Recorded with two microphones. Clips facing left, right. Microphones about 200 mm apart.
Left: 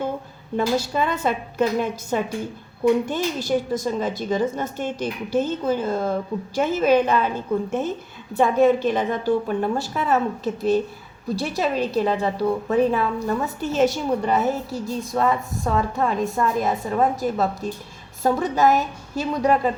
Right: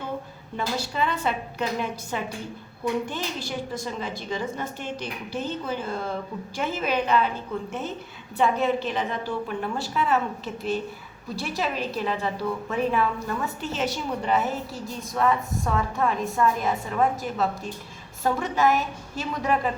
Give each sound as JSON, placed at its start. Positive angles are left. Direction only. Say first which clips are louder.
{"t": 0.5, "sound": "a woman's voice", "louder": "left 7 dB", "side_deg": 45}
{"t": 8.4, "sound": "a woman's voice", "louder": "left 6 dB", "side_deg": 45}